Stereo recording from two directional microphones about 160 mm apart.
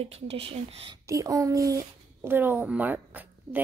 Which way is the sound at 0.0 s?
40° right (ahead or behind).